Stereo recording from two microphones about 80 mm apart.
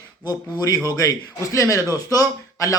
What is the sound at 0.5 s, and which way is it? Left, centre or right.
A man's voice, left.